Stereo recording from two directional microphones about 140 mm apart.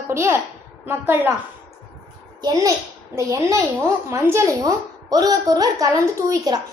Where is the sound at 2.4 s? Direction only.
25° right (ahead or behind).